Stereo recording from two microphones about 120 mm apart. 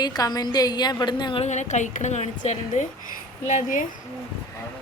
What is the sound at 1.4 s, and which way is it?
A woman's voice, 75° left (ahead or behind).